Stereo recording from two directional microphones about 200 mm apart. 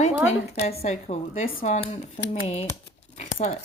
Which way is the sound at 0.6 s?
30° left (ahead or behind).